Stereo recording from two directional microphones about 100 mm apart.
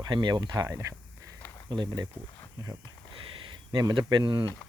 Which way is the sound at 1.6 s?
50° right (ahead or behind).